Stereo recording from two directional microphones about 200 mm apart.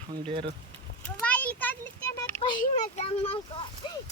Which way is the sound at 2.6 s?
30° left (ahead or behind).